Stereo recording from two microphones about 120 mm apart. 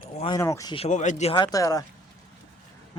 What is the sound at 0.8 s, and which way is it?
Speech, 80° left.